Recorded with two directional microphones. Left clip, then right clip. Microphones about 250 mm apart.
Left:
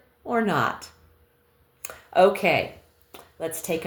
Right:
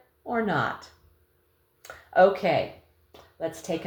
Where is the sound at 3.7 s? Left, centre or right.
Left.